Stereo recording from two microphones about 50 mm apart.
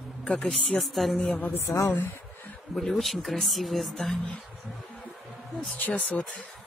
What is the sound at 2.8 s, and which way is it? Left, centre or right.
Speech, centre.